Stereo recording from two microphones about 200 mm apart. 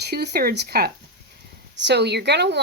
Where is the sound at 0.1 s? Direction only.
50° right (ahead or behind).